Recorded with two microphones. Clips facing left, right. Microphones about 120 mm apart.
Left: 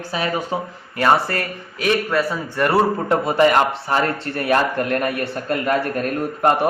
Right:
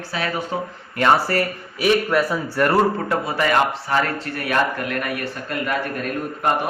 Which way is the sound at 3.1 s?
30° left (ahead or behind).